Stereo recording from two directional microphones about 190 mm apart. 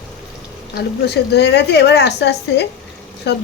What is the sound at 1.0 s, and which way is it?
A woman's voice, 60° left (ahead or behind).